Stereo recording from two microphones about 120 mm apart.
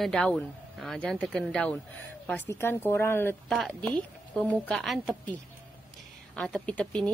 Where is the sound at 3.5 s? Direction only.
5° left (ahead or behind).